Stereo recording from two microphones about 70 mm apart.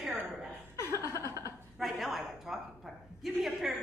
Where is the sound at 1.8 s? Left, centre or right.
Centre.